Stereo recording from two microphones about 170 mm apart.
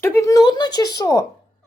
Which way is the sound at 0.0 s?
15° left (ahead or behind).